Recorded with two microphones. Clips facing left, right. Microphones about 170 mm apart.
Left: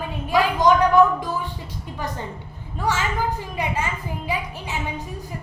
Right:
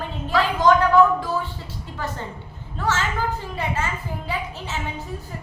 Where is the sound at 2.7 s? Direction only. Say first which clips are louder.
Left 1 dB; 15° left (ahead or behind).